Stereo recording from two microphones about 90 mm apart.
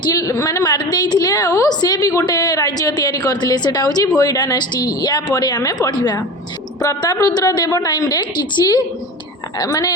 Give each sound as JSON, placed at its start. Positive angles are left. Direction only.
{"t": 0.0, "sound": "a woman's voice", "side_deg": 40}